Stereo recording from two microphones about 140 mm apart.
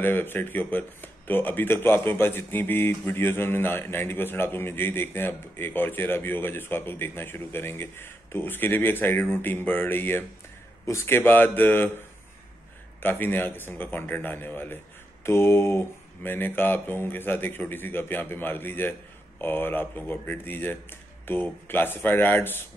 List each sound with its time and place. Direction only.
0.0 s speech: 15° left (ahead or behind)
13.0 s speech: 15° left (ahead or behind)